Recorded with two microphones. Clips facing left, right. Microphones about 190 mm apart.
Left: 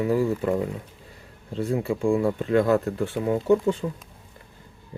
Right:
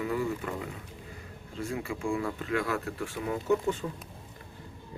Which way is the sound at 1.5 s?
35° left (ahead or behind).